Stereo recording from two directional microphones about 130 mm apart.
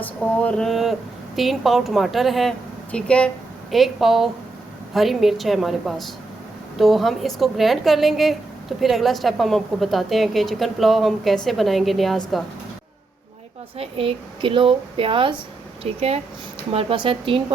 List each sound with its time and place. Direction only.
0.0 s mantra: 10° left (ahead or behind)
1.4 s a woman's voice: centre (ahead or behind)
13.7 s a woman's voice: 45° right (ahead or behind)
16.7 s speech: 40° right (ahead or behind)